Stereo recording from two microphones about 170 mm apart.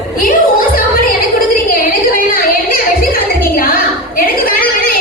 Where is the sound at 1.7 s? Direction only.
55° left (ahead or behind).